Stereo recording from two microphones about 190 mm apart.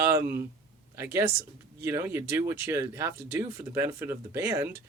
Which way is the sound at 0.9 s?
15° right (ahead or behind).